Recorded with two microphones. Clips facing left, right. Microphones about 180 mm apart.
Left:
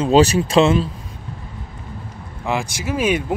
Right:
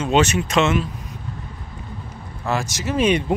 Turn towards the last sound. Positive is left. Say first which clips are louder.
# right 1 dB
turn(degrees=5)  # may be behind; listen again after turning